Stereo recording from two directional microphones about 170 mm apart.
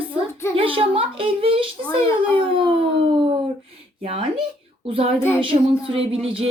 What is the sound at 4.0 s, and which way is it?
A woman's voice, 30° right (ahead or behind).